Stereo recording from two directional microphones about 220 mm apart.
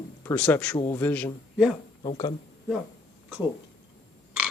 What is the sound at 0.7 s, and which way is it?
Speech, 20° left (ahead or behind).